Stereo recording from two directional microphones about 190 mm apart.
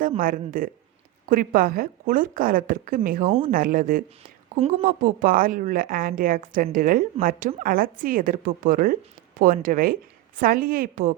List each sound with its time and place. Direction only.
0.2 s a woman's voice: 45° right (ahead or behind)